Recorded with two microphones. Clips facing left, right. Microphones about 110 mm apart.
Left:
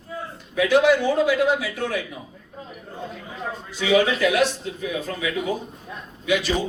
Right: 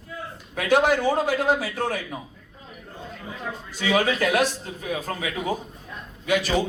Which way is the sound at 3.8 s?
45° right (ahead or behind).